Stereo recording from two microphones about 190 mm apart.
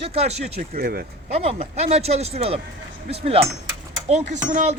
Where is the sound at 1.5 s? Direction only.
35° right (ahead or behind).